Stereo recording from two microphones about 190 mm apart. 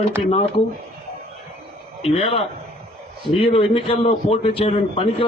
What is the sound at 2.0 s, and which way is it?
A man's voice, 30° left (ahead or behind).